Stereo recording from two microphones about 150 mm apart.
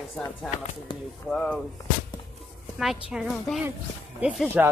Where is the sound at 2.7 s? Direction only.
5° right (ahead or behind).